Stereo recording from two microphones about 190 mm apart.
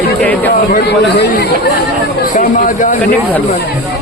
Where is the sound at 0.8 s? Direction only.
60° left (ahead or behind).